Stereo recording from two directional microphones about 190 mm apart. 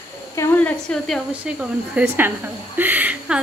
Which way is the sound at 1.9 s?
10° right (ahead or behind).